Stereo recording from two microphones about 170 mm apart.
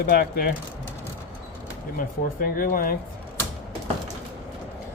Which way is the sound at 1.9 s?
60° left (ahead or behind).